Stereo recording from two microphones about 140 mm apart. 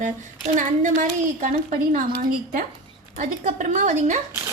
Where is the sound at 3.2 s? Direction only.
60° right (ahead or behind).